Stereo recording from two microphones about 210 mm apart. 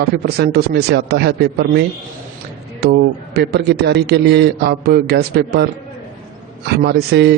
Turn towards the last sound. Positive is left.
turn(degrees=-50)  # may be behind; listen again after turning